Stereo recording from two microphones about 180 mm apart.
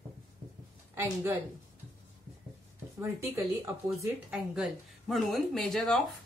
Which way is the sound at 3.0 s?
15° right (ahead or behind).